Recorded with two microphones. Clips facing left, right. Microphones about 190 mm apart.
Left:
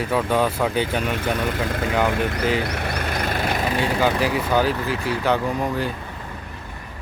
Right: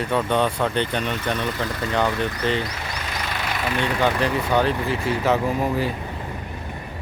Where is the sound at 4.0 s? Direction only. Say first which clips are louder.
Even; 5° left (ahead or behind).